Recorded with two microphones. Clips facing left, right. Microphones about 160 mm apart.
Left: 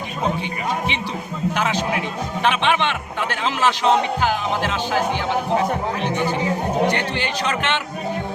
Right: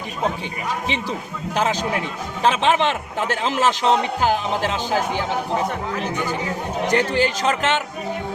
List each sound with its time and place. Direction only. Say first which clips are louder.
1.5 s a man's voice: right 3 dB; 35° right (ahead or behind)
6.9 s a man's voice: right 5 dB; 40° right (ahead or behind)